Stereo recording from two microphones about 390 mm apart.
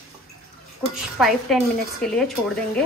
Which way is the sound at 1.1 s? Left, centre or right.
Centre.